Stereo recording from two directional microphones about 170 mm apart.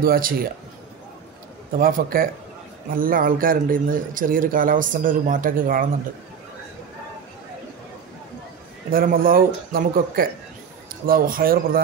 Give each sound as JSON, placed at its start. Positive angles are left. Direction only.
{"t": 0.0, "sound": "a man's voice", "side_deg": -55}
{"t": 1.8, "sound": "a man's voice", "side_deg": -55}
{"t": 8.9, "sound": "a man's voice", "side_deg": -55}